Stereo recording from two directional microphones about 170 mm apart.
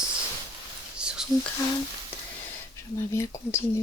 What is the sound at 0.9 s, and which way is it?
Whispering, 5° right (ahead or behind).